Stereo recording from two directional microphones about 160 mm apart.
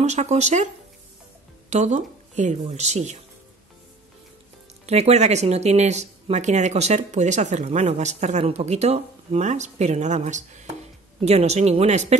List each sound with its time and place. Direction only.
0.0 s speech: 45° right (ahead or behind)
1.7 s speech: 45° right (ahead or behind)
4.8 s speech: 45° right (ahead or behind)